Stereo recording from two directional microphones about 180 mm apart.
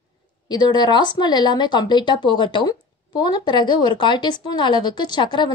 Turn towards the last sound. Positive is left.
turn(degrees=25)  # may be behind; listen again after turning